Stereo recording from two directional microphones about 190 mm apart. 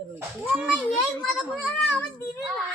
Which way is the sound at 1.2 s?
Centre (ahead or behind).